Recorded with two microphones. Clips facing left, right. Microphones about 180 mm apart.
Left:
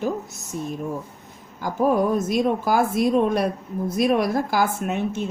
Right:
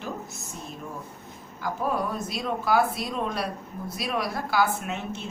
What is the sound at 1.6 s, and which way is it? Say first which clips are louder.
Speech: left 8 dB; 45° left (ahead or behind).